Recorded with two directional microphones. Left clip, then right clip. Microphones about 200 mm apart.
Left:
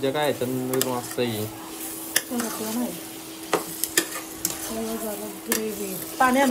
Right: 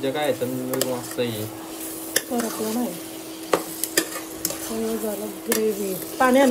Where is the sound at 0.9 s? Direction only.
25° left (ahead or behind).